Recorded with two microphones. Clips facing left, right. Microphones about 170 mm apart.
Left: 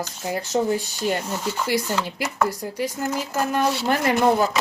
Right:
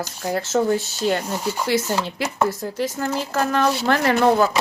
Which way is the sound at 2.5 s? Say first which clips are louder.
Right 2 dB; 15° left (ahead or behind).